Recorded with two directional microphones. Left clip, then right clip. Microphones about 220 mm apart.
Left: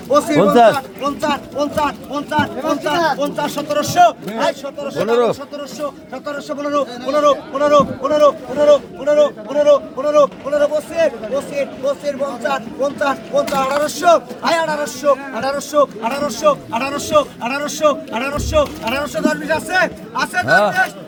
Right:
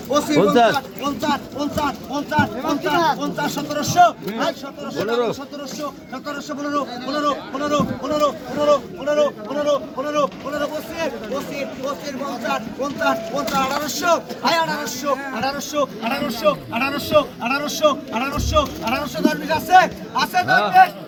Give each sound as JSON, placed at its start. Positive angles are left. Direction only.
{"t": 0.1, "sound": "speech", "side_deg": 10}
{"t": 0.5, "sound": "speech", "side_deg": 50}
{"t": 1.0, "sound": "speech", "side_deg": 15}
{"t": 4.9, "sound": "speech", "side_deg": 55}
{"t": 6.2, "sound": "speech", "side_deg": 10}
{"t": 20.5, "sound": "speech", "side_deg": 50}